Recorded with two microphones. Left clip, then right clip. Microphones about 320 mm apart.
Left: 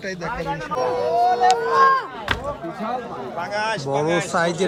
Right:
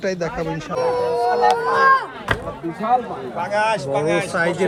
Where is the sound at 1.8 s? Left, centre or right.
Right.